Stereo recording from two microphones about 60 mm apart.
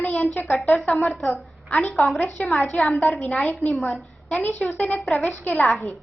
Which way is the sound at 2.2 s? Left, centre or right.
Left.